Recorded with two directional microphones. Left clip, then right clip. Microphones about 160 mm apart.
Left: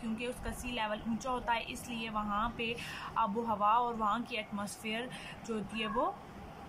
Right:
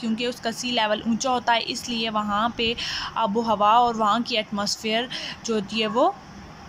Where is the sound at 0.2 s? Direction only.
50° right (ahead or behind).